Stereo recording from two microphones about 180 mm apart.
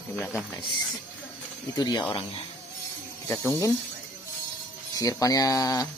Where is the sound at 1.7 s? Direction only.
20° left (ahead or behind).